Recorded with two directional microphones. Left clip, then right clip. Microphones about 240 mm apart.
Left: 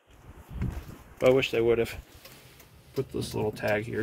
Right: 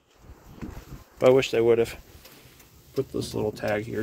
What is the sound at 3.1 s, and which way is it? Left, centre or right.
Speech, centre.